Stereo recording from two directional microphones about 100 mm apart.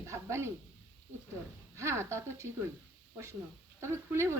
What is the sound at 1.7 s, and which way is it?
Speech, 30° right (ahead or behind).